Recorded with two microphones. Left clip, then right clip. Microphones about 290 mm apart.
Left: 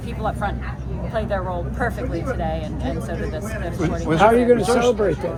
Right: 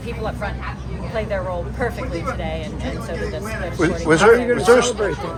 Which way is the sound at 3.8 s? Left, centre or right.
Right.